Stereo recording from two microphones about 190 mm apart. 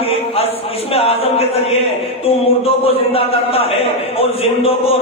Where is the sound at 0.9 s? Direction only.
30° left (ahead or behind).